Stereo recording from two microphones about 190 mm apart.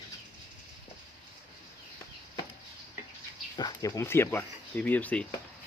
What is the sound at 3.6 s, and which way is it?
Speech, 20° left (ahead or behind).